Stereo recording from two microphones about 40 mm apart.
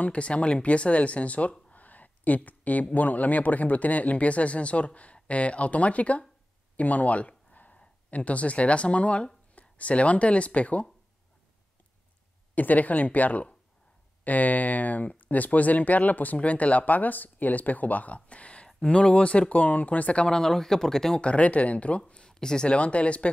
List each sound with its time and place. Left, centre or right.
0.0 s speech: left
6.8 s a sound: left
8.1 s speech: left
12.5 s speech: left
20.2 s speech: centre
21.2 s speech: left
22.2 s a sound: centre
22.7 s speech: left